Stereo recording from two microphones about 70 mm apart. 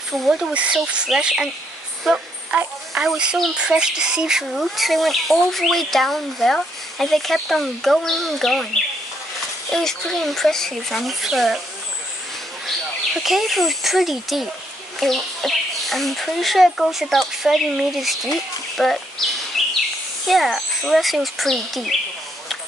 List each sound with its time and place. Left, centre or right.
0.3 s speech: centre
2.9 s speech: centre
9.7 s speech: centre
13.2 s speech: centre
19.6 s bird: centre
20.2 s speech: centre